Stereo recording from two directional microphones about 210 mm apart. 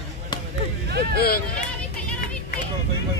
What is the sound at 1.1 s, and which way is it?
Speech, 50° left (ahead or behind).